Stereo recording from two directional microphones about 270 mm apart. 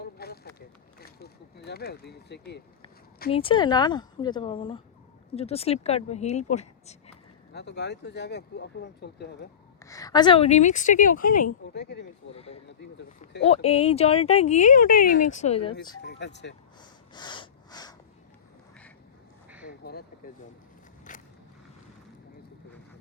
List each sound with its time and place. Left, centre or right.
0.0 s a sound: left
3.2 s a woman's voice: centre
7.5 s speech: left
9.8 s speech: centre; by 12.0 s left
12.3 s speech: left
12.6 s speech: left
13.4 s speech: left
16.0 s speech: left
16.8 s snort: centre
19.8 s speech: left
21.1 s a sound: left